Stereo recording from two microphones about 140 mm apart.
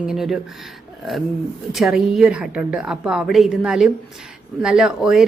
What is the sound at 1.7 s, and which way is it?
A woman's voice, centre (ahead or behind).